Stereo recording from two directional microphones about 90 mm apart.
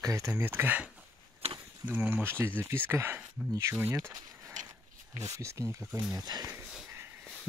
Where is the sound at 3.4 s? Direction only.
10° right (ahead or behind).